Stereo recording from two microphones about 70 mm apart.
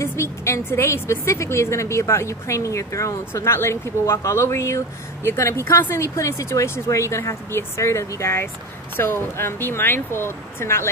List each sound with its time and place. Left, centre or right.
0.0 s speech: left
3.5 s speech: left